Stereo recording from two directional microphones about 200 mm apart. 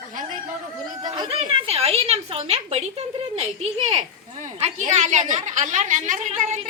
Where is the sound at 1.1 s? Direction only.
25° right (ahead or behind).